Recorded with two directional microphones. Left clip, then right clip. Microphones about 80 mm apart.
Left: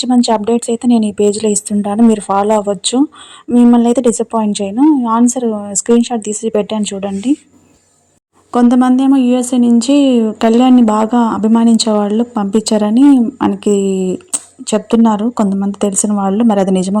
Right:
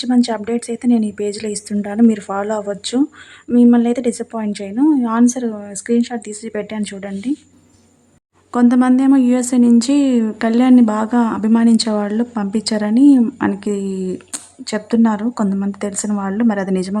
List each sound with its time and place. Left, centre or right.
0.0 s speech: left
0.9 s speech: right
1.3 s speech: left
3.5 s speech: left
4.8 s speech: centre
5.7 s speech: left
8.7 s speech: left
9.3 s speech: centre
10.3 s speech: left
10.6 s speech: centre; by 16.7 s left